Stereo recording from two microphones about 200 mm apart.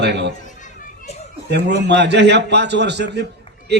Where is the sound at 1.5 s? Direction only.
55° right (ahead or behind).